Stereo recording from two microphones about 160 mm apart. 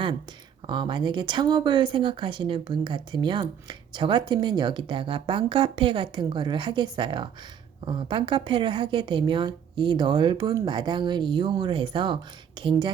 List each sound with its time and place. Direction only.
0.7 s speech: 30° right (ahead or behind)